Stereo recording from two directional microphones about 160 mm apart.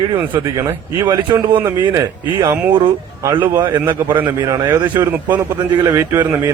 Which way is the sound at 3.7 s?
15° right (ahead or behind).